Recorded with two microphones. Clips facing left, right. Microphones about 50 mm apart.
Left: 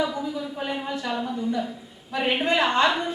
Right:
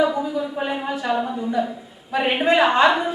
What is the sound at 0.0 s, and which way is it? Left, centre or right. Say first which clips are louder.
A woman's voice: right 6 dB; centre.